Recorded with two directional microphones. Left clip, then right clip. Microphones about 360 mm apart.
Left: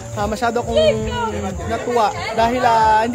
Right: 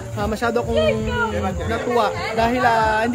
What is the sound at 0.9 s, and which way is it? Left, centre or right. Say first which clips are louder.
Speech: left 2 dB; left.